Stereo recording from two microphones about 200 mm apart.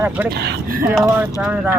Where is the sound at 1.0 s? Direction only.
5° right (ahead or behind).